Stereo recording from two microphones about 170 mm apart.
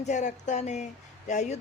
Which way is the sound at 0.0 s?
45° left (ahead or behind).